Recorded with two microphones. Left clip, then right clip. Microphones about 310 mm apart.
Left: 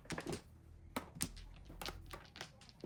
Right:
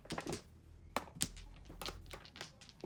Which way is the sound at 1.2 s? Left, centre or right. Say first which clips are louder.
Right 4 dB; centre.